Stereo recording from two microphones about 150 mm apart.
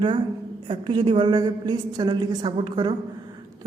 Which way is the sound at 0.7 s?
35° right (ahead or behind).